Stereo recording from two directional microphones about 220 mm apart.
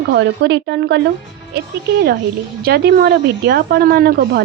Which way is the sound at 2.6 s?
45° right (ahead or behind).